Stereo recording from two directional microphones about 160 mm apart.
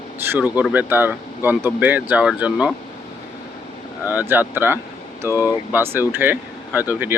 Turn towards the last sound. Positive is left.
turn(degrees=-10)  # may be behind; listen again after turning